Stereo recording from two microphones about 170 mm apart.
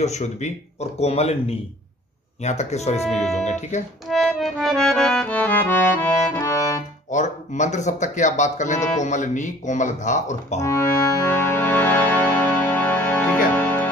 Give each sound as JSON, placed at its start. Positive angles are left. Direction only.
{"t": 0.0, "sound": "speech", "side_deg": 40}
{"t": 3.1, "sound": "speech", "side_deg": 0}
{"t": 3.4, "sound": "speech", "side_deg": 45}
{"t": 4.1, "sound": "accordion", "side_deg": 0}
{"t": 7.1, "sound": "speech", "side_deg": 45}
{"t": 10.6, "sound": "music", "side_deg": 15}